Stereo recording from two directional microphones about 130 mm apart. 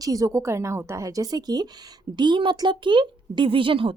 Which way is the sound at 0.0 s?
25° right (ahead or behind).